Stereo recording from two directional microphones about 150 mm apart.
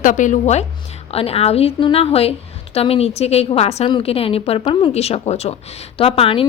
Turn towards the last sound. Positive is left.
turn(degrees=40)  # may be behind; listen again after turning